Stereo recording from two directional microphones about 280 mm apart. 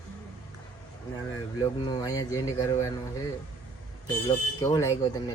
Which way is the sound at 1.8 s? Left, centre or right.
Centre.